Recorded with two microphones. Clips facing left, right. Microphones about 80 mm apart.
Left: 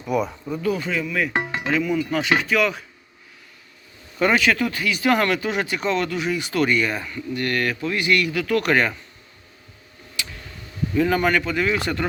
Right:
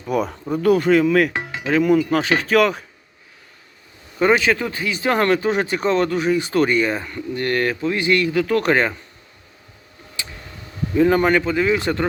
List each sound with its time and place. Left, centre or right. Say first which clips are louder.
0.1 s speech: right 2 dB; right
1.4 s music: left 1 dB; left
1.8 s speech: right 6 dB; right
4.2 s speech: right 2 dB; right
10.2 s a sound: left 1 dB; right
10.9 s speech: right 4 dB; right